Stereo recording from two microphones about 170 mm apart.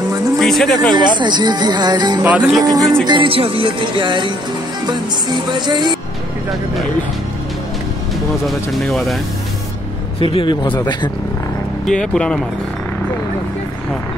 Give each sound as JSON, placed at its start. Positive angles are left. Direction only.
{"t": 0.4, "sound": "speech", "side_deg": 0}
{"t": 0.9, "sound": "music", "side_deg": -25}
{"t": 2.2, "sound": "music", "side_deg": -5}
{"t": 2.6, "sound": "music", "side_deg": -20}
{"t": 8.5, "sound": "speech", "side_deg": 0}
{"t": 10.3, "sound": "speech", "side_deg": 30}
{"t": 11.8, "sound": "speech", "side_deg": 5}